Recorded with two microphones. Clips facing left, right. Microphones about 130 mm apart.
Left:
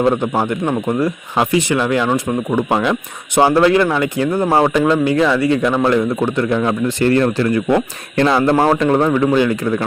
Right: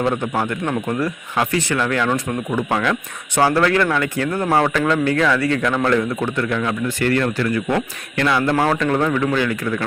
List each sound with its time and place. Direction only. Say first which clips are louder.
0.1 s speech: left 4 dB; 25° left (ahead or behind)